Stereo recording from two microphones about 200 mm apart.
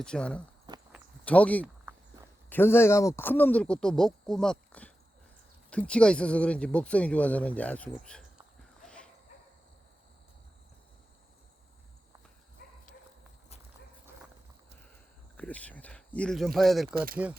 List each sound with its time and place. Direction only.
0.0 s speech: 5° left (ahead or behind)
0.7 s a sound: 20° right (ahead or behind)
1.2 s speech: 5° left (ahead or behind)
1.6 s a sound: 5° right (ahead or behind)
2.5 s speech: 10° left (ahead or behind)
12.9 s dog: 45° left (ahead or behind)
15.4 s speech: 5° left (ahead or behind)